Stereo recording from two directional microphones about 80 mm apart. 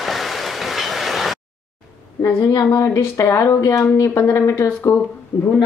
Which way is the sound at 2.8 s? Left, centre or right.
Left.